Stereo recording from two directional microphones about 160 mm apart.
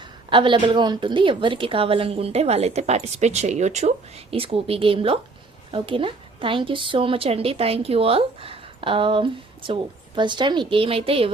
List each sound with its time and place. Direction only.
0.0 s a woman's voice: 30° right (ahead or behind)